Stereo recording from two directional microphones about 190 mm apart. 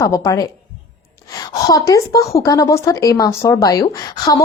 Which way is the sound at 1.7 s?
20° left (ahead or behind).